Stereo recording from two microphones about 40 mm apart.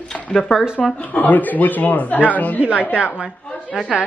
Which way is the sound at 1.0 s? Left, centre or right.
Left.